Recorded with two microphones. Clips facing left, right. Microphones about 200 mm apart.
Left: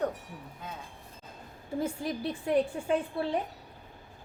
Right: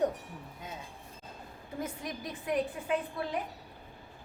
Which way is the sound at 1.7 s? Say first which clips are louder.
Left 6 dB; 30° left (ahead or behind).